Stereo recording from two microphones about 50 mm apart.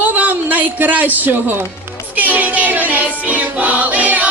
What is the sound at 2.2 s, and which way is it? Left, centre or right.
A woman's voice, right.